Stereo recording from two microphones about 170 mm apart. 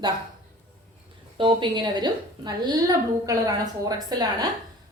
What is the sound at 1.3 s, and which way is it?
A woman's voice, 30° right (ahead or behind).